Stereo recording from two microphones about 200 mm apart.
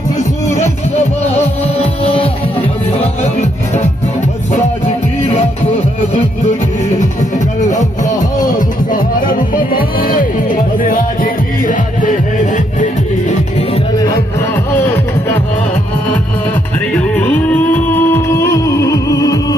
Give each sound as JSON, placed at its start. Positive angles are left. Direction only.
{"t": 1.6, "sound": "music", "side_deg": 30}
{"t": 8.5, "sound": "music", "side_deg": 45}
{"t": 13.9, "sound": "music", "side_deg": 20}
{"t": 16.9, "sound": "music", "side_deg": 5}